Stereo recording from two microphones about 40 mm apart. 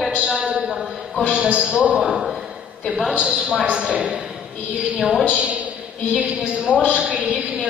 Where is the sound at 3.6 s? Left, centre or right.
Right.